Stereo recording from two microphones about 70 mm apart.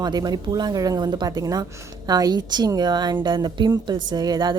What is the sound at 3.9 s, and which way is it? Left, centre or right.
Speech, right.